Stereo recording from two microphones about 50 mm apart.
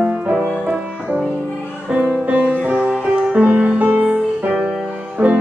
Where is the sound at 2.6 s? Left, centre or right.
Right.